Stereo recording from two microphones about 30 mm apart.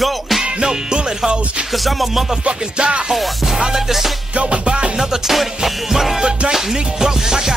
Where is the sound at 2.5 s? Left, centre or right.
Right.